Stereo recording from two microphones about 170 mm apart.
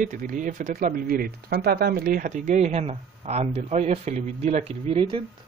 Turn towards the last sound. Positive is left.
turn(degrees=-35)  # may be behind; listen again after turning